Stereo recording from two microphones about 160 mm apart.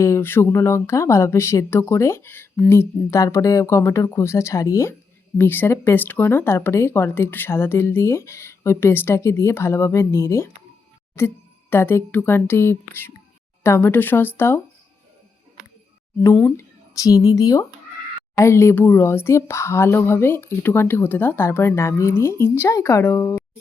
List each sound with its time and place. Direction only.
0.0 s speech: 15° left (ahead or behind)
16.9 s speech: 20° left (ahead or behind)